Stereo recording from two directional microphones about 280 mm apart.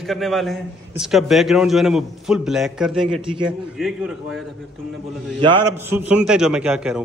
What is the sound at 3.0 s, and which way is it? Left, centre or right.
Speech, centre.